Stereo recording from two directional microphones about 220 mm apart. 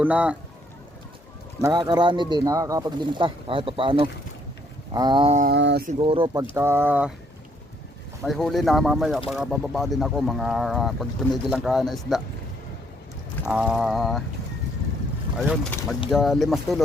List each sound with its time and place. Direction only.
0.0 s speech: 5° right (ahead or behind)
1.6 s speech: 20° right (ahead or behind)
5.5 s mantra: 50° right (ahead or behind)
5.9 s speech: 25° right (ahead or behind)
6.5 s speech: 10° right (ahead or behind)
8.2 s speech: centre (ahead or behind)
13.4 s speech: 5° right (ahead or behind)
15.4 s speech: centre (ahead or behind)